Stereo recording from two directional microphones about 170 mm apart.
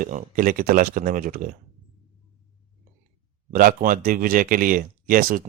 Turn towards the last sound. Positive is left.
turn(degrees=-55)  # may be behind; listen again after turning